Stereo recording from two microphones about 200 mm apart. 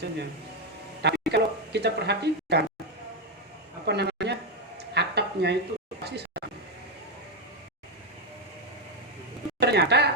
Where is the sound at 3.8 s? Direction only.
55° right (ahead or behind).